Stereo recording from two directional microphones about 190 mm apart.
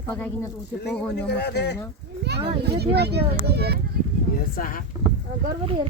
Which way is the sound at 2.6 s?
60° right (ahead or behind).